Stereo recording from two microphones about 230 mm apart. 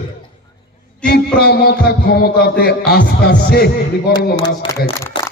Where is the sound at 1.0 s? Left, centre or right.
Left.